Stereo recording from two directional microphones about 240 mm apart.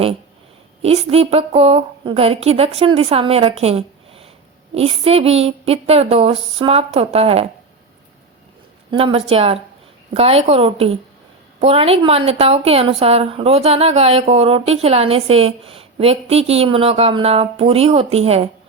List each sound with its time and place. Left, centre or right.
0.8 s a woman's voice: right
8.9 s a woman's voice: right